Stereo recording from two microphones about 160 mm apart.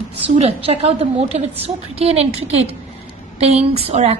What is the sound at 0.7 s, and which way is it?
A woman's voice, 40° right (ahead or behind).